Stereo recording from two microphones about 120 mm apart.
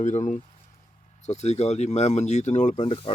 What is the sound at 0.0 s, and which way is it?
Speech, 90° left.